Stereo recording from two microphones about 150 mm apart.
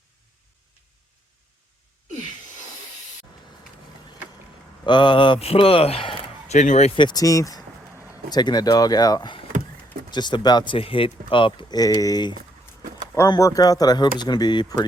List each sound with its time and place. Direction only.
4.9 s speech: 30° left (ahead or behind)
6.6 s speech: 50° left (ahead or behind)
7.0 s speech: 25° left (ahead or behind)